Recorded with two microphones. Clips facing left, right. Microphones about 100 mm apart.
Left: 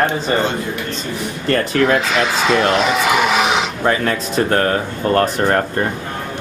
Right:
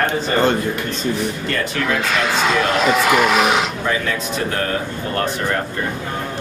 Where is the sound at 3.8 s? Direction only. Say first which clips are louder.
Left 4 dB; 45° left (ahead or behind).